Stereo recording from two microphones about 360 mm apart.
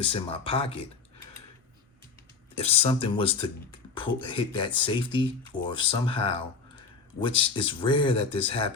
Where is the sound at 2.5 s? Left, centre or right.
Centre.